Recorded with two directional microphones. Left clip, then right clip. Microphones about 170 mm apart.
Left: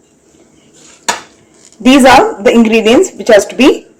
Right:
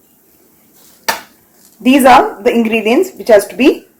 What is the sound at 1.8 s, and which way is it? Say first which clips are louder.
A woman's voice: left 2 dB; 25° left (ahead or behind).